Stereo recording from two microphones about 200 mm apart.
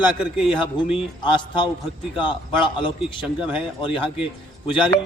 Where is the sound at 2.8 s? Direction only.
25° left (ahead or behind).